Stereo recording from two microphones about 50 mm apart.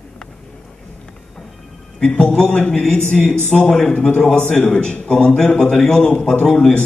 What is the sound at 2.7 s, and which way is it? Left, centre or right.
A man's voice, centre.